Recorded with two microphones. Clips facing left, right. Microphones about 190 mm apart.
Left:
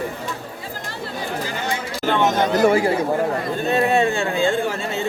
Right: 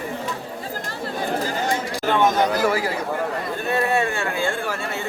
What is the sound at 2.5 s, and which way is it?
Speech, 25° left (ahead or behind).